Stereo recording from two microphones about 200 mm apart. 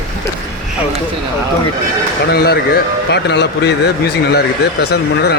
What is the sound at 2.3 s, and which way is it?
Speech, 50° left (ahead or behind).